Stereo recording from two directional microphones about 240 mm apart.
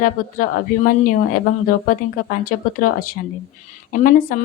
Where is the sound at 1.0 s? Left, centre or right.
Left.